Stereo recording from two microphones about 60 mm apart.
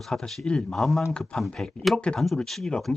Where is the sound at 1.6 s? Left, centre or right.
Centre.